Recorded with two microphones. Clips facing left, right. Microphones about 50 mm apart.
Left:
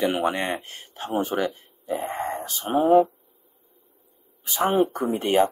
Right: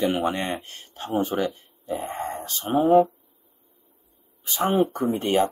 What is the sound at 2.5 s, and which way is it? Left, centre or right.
Speech, centre.